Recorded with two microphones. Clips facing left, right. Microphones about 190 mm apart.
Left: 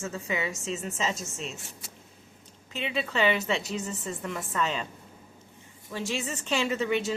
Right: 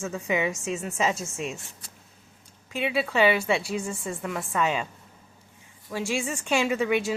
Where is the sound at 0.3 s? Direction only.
15° right (ahead or behind).